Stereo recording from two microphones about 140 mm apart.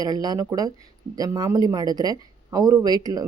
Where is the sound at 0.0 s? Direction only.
30° right (ahead or behind).